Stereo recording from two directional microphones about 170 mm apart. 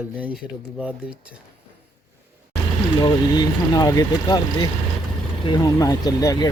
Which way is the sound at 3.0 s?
25° left (ahead or behind).